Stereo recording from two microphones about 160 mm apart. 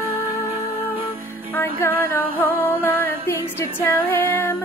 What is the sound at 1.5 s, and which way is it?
Female singing, 15° left (ahead or behind).